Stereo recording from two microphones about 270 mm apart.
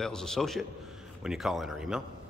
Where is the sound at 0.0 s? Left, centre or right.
Centre.